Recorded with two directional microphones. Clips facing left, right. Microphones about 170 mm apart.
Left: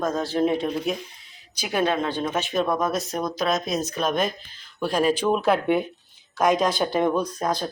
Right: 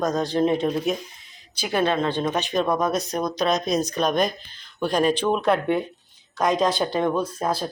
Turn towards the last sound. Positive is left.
turn(degrees=-5)  # may be behind; listen again after turning